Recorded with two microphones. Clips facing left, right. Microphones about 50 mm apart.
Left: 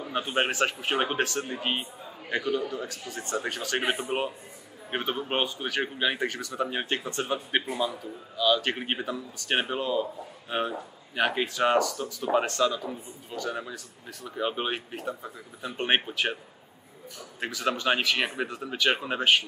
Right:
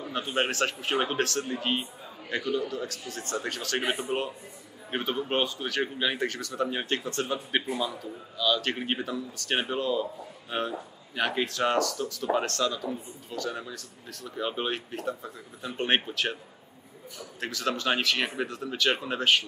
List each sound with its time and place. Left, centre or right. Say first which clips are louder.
0.1 s speech: left 1 dB; centre; by 2.7 s left
2.7 s speech: even; centre
4.1 s a man's voice: left 1 dB; left
4.9 s speech: even; centre
17.4 s speech: left 1 dB; centre